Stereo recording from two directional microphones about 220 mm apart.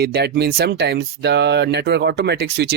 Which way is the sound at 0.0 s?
50° right (ahead or behind).